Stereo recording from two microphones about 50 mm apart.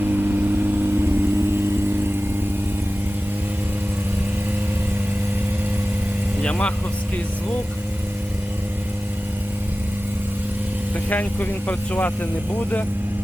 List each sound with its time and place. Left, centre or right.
0.0 s vehicle: right
6.4 s speech: left
11.1 s speech: left